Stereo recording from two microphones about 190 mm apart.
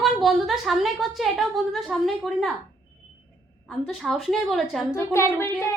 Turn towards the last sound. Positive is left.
turn(degrees=15)  # may be behind; listen again after turning